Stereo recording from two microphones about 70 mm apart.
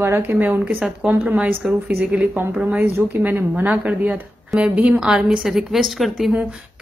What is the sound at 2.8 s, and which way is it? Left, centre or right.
Speech, right.